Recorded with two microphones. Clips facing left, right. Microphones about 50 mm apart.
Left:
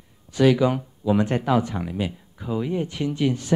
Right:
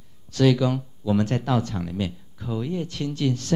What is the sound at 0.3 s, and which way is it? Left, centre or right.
Speech, centre.